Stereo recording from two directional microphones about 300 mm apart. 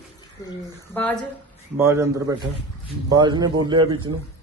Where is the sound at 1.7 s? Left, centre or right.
Centre.